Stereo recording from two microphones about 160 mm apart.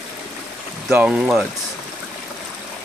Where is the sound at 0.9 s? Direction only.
5° right (ahead or behind).